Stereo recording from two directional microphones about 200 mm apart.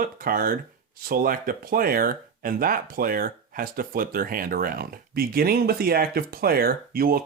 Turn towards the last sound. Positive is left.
turn(degrees=-50)  # may be behind; listen again after turning